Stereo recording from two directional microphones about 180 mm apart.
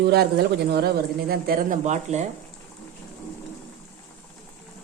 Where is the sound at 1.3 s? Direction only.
50° right (ahead or behind).